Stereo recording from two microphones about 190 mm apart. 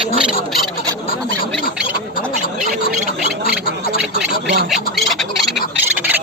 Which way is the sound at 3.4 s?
50° left (ahead or behind).